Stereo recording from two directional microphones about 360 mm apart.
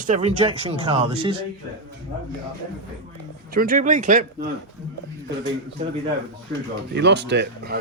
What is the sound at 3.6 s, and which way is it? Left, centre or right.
Speech, right.